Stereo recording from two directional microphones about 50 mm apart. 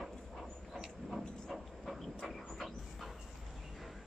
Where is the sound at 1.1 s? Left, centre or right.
Centre.